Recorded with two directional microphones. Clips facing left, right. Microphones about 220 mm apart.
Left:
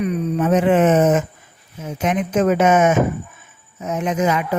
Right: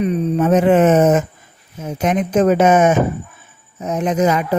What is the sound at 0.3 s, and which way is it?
Speech, 40° right (ahead or behind).